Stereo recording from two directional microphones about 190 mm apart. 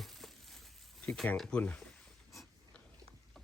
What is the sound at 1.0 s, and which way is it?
Speech, 5° left (ahead or behind).